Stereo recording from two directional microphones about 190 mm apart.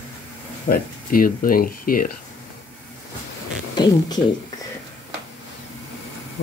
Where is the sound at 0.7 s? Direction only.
50° left (ahead or behind).